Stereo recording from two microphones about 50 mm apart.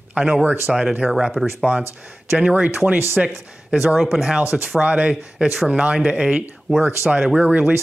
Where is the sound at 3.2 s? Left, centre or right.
Centre.